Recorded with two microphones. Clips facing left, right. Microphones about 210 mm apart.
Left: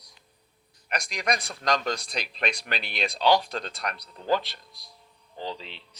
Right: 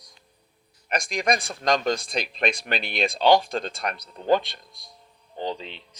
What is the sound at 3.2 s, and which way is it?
Speech, 25° right (ahead or behind).